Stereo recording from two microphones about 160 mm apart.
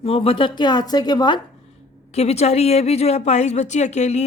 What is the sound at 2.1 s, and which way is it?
A woman's voice, 40° left (ahead or behind).